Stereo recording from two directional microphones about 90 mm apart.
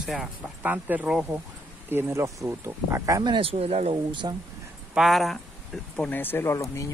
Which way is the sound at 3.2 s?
75° right (ahead or behind).